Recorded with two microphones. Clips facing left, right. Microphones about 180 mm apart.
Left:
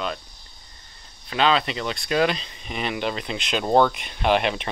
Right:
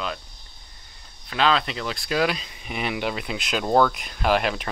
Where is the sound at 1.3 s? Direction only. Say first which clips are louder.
Left 1 dB; centre (ahead or behind).